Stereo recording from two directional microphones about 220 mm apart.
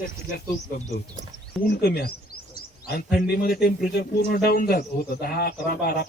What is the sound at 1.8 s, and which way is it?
Speech, 45° left (ahead or behind).